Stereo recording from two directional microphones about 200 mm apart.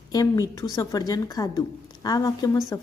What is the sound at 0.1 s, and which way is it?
A woman's voice, 15° left (ahead or behind).